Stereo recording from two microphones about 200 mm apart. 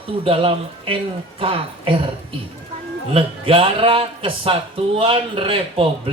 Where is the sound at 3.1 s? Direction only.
25° right (ahead or behind).